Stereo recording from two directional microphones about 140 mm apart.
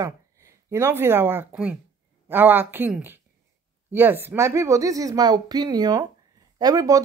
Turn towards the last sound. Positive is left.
turn(degrees=-25)  # may be behind; listen again after turning